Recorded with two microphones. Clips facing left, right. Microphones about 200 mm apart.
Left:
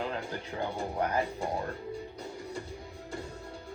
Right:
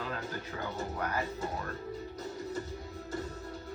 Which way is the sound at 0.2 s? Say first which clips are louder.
Left 3 dB; 15° left (ahead or behind).